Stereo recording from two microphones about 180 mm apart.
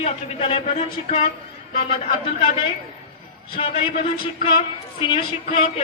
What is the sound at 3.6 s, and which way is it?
A man's voice, 35° left (ahead or behind).